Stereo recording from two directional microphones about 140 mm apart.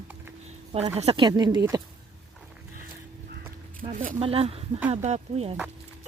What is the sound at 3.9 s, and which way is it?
Speech, 70° right (ahead or behind).